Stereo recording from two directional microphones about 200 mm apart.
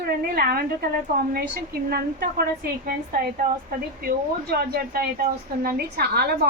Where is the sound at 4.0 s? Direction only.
50° right (ahead or behind).